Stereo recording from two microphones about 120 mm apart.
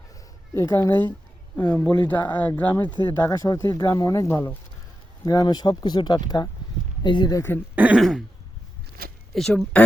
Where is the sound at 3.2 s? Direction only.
30° left (ahead or behind).